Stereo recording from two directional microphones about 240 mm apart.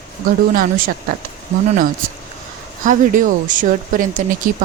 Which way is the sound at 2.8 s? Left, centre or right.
Right.